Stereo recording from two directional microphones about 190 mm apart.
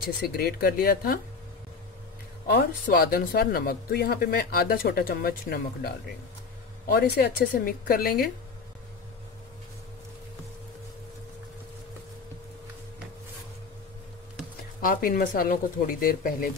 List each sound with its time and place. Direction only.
0.0 s speech: 55° left (ahead or behind)
2.4 s speech: 55° left (ahead or behind)
14.6 s speech: 50° left (ahead or behind)